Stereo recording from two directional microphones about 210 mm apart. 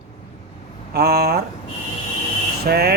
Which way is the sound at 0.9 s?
50° right (ahead or behind).